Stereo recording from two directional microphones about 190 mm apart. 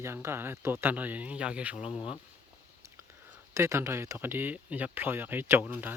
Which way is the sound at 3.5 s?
15° right (ahead or behind).